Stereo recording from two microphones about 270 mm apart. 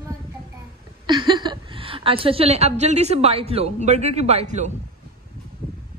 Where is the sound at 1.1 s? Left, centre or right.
Centre.